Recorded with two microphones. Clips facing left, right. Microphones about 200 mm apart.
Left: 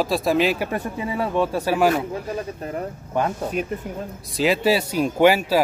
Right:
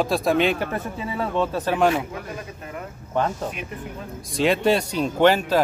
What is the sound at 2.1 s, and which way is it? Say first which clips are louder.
Speech: left 6 dB; 35° left (ahead or behind).